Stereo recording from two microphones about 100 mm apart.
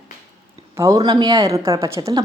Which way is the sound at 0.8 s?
40° right (ahead or behind).